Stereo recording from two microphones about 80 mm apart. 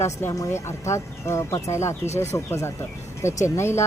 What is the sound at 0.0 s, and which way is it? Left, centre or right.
Speech, left.